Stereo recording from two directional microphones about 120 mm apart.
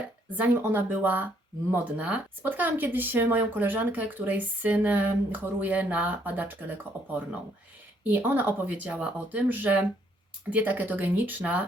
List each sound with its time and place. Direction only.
0.3 s speech: 15° right (ahead or behind)